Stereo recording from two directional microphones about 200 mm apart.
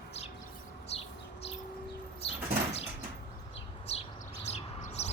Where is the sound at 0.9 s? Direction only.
30° left (ahead or behind).